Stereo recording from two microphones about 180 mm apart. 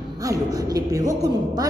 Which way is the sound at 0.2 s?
20° right (ahead or behind).